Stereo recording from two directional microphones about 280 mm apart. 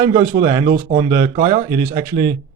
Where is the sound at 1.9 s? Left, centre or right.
Centre.